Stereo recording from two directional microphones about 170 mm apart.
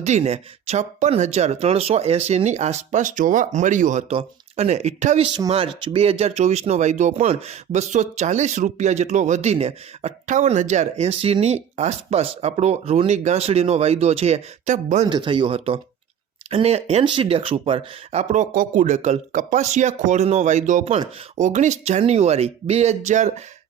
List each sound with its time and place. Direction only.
0.0 s speech: 40° right (ahead or behind)
15.1 s speech: 30° right (ahead or behind); by 23.3 s 45° right (ahead or behind)